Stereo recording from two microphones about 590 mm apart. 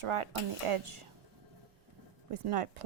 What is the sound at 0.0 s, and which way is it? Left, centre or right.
Speech, right.